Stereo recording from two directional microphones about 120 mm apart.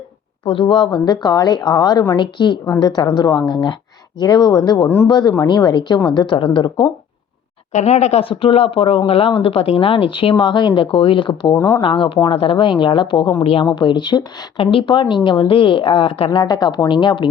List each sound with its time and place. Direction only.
0.4 s a woman's voice: 45° left (ahead or behind)
7.7 s speech: 70° left (ahead or behind); by 11.5 s 45° left (ahead or behind)
11.5 s speech: 25° left (ahead or behind)
11.8 s speech: 45° left (ahead or behind)
13.7 s speech: 40° left (ahead or behind)
16.4 s a woman's voice: 35° left (ahead or behind)